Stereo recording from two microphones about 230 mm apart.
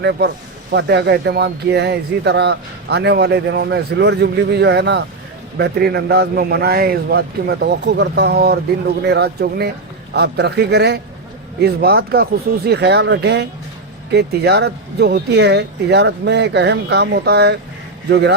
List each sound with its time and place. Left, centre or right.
0.0 s speech: right